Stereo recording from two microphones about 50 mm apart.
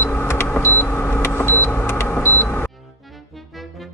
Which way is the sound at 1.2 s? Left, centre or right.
Left.